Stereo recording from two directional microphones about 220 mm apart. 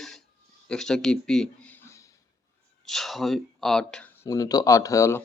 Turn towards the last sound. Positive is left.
turn(degrees=15)  # may be behind; listen again after turning